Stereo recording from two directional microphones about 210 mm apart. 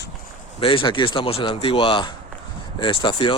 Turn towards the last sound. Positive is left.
turn(degrees=20)  # may be behind; listen again after turning